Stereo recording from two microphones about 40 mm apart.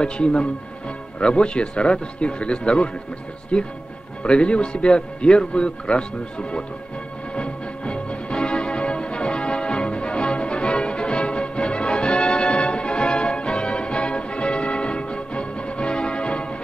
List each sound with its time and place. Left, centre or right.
0.0 s speech: left
7.3 s music: left